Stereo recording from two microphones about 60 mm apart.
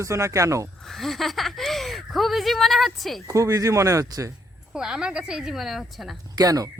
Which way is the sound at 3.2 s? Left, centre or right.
Right.